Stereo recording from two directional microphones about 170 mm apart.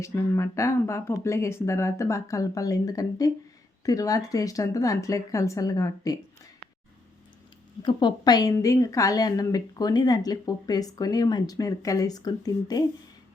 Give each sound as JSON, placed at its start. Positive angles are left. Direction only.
{"t": 0.0, "sound": "a woman's voice", "side_deg": 15}
{"t": 7.8, "sound": "a woman's voice", "side_deg": 25}